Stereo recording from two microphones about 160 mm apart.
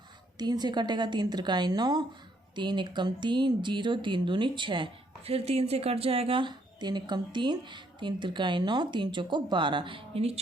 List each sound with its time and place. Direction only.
0.3 s speech: 25° right (ahead or behind)